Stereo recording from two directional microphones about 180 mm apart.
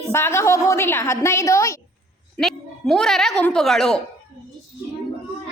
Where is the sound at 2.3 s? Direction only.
Centre (ahead or behind).